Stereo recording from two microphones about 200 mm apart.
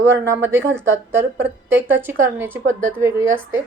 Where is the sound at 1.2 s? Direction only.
65° right (ahead or behind).